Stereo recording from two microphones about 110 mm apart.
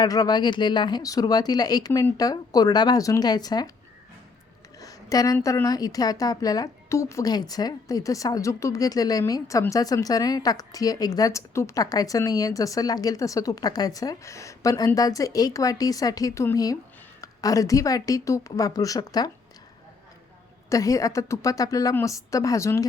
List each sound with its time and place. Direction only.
0.0 s a woman's voice: 35° left (ahead or behind)
4.8 s a sound: 30° left (ahead or behind)
5.6 s a woman's voice: 35° left (ahead or behind)
20.7 s a woman's voice: 30° left (ahead or behind)